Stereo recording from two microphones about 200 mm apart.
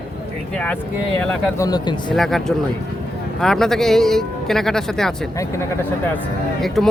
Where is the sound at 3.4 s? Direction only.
Centre (ahead or behind).